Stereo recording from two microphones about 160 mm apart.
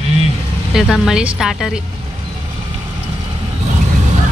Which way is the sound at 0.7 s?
Centre (ahead or behind).